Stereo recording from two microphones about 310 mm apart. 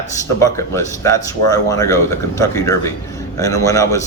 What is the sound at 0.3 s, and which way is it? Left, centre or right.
Speech, centre.